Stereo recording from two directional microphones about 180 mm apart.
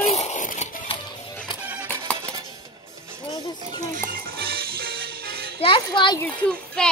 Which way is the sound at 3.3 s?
20° left (ahead or behind).